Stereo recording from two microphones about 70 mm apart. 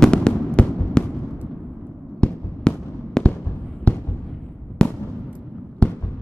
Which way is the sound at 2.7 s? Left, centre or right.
Centre.